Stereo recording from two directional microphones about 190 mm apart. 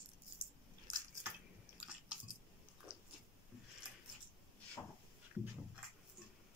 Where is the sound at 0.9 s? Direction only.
20° right (ahead or behind).